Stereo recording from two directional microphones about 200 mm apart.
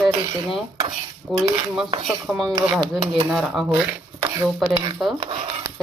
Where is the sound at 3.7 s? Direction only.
10° right (ahead or behind).